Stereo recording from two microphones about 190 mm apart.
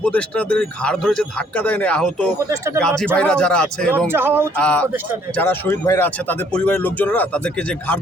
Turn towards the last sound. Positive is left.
turn(degrees=5)  # may be behind; listen again after turning